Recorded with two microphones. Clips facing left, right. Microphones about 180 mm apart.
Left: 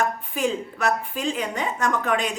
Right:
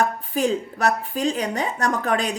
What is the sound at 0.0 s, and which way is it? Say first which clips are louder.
A woman's voice: right 2 dB; 35° right (ahead or behind).